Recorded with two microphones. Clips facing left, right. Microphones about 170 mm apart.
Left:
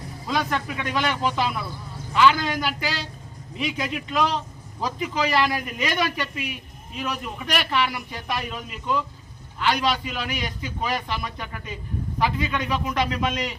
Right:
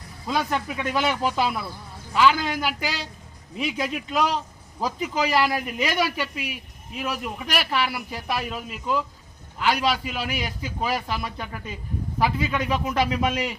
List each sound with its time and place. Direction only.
0.3 s a man's voice: 10° right (ahead or behind)